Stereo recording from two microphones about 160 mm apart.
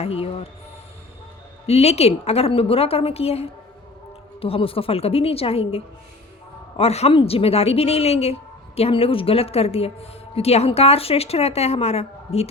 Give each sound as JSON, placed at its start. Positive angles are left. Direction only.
{"t": 0.0, "sound": "a woman's voice", "side_deg": 35}
{"t": 1.6, "sound": "a woman's voice", "side_deg": 40}